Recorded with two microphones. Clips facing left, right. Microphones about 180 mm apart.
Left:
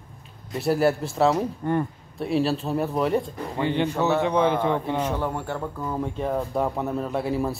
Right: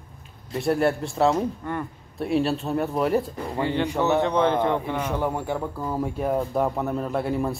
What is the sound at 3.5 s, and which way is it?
A man's voice, 20° left (ahead or behind).